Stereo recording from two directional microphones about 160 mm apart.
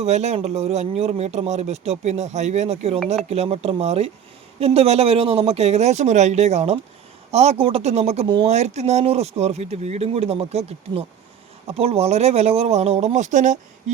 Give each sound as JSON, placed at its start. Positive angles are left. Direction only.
{"t": 0.0, "sound": "speech", "side_deg": -45}